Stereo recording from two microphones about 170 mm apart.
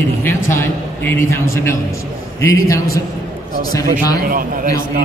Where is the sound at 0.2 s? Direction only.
15° left (ahead or behind).